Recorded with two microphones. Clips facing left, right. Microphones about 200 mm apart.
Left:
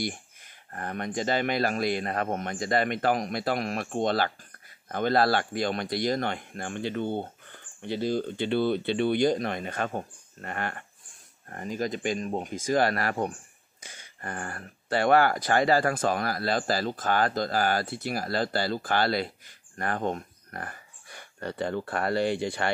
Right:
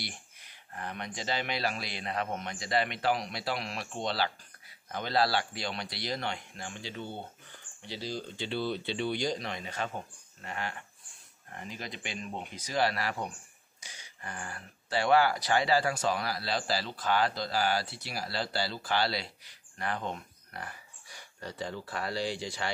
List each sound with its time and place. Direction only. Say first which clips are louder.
0.0 s speech: left 11 dB; 50° left (ahead or behind)